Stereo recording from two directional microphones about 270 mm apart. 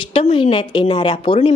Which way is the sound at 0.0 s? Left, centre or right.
Centre.